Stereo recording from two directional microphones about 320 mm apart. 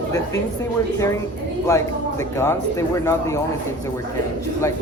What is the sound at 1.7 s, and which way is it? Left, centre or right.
Speech, centre.